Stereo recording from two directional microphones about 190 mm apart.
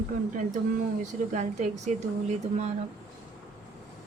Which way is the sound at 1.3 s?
40° right (ahead or behind).